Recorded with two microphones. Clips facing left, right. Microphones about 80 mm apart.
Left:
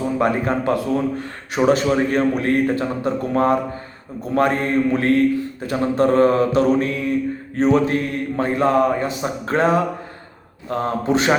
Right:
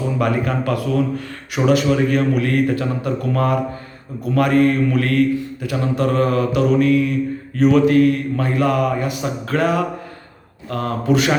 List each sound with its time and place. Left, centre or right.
0.2 s mantra: left